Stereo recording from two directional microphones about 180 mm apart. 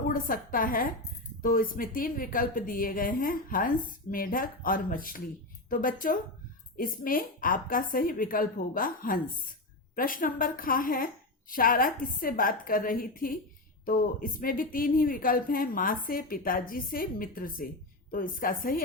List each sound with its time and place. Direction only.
0.1 s a woman's voice: 50° left (ahead or behind)